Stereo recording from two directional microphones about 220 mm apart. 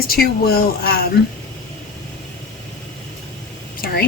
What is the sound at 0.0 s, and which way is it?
Speech, 45° left (ahead or behind).